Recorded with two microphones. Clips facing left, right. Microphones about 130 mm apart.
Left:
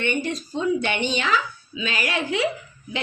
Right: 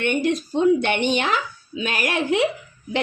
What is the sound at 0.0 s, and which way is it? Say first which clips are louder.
Speech: right 4 dB; 60° right (ahead or behind).